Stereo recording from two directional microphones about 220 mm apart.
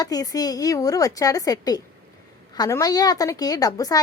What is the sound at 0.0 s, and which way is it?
A woman's voice, 15° left (ahead or behind).